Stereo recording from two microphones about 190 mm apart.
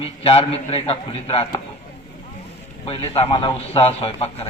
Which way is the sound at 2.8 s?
30° left (ahead or behind).